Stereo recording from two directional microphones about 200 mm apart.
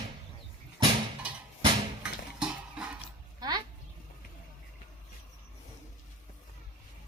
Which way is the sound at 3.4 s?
20° right (ahead or behind).